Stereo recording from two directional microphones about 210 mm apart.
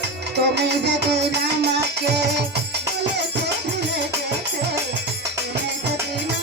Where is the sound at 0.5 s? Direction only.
55° right (ahead or behind).